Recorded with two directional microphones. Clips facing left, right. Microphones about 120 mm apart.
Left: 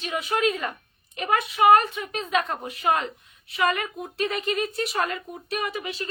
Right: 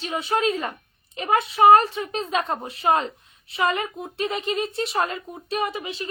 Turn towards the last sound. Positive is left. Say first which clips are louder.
# right 3 dB
turn(degrees=-25)  # may be behind; listen again after turning